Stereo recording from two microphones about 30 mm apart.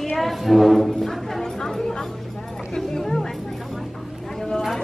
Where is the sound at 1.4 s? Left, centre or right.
Centre.